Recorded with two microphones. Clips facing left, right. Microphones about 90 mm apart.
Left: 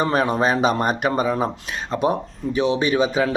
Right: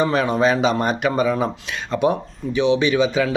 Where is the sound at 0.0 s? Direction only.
40° left (ahead or behind).